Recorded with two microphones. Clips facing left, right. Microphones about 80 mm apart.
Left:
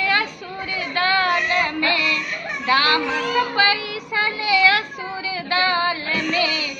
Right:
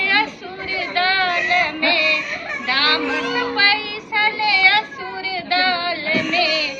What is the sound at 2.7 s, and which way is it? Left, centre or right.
Children playing, left.